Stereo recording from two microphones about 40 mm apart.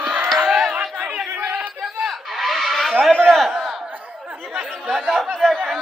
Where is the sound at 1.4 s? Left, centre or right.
Right.